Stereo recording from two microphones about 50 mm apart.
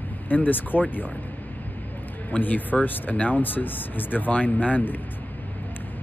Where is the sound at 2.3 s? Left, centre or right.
Left.